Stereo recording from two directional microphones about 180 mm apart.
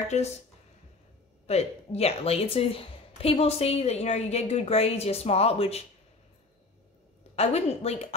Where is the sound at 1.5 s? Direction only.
35° left (ahead or behind).